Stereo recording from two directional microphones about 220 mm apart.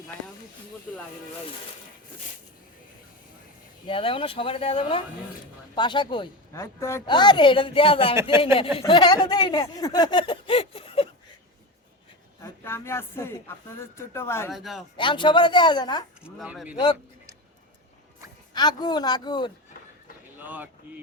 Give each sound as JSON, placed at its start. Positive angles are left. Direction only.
{"t": 0.9, "sound": "speech", "side_deg": 0}
{"t": 3.8, "sound": "a woman's voice", "side_deg": 25}
{"t": 8.1, "sound": "speech", "side_deg": -10}
{"t": 8.8, "sound": "a woman's voice", "side_deg": 20}
{"t": 12.4, "sound": "speech", "side_deg": 10}
{"t": 14.5, "sound": "speech", "side_deg": 0}
{"t": 14.9, "sound": "a woman's voice", "side_deg": 20}
{"t": 16.2, "sound": "speech", "side_deg": -5}
{"t": 18.5, "sound": "a woman's voice", "side_deg": 20}
{"t": 20.4, "sound": "speech", "side_deg": -10}